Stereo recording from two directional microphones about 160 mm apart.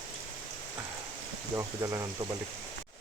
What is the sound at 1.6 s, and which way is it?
Speech, 15° right (ahead or behind).